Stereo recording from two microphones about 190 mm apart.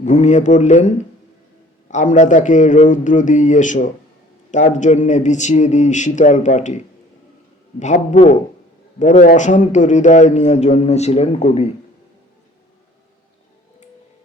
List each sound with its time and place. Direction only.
0.0 s a man's voice: 40° left (ahead or behind)